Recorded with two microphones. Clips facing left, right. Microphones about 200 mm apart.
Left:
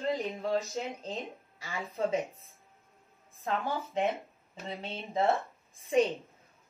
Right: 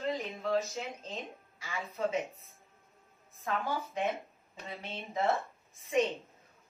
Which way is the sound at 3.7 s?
30° left (ahead or behind).